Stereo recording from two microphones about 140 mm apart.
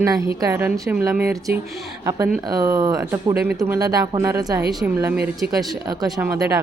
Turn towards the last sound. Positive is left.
turn(degrees=-15)  # may be behind; listen again after turning